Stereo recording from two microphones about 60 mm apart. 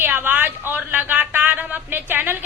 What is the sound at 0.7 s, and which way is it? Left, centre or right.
A woman's voice, right.